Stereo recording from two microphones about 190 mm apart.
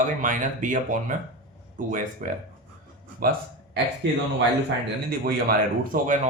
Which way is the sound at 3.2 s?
50° right (ahead or behind).